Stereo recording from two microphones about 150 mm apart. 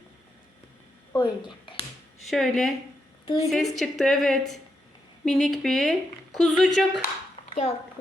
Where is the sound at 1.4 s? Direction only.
35° left (ahead or behind).